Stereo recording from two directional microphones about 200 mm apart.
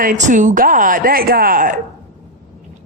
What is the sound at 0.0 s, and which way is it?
Speech, 40° right (ahead or behind).